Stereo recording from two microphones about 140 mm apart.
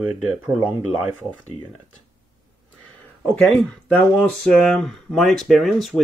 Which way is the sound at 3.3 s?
10° left (ahead or behind).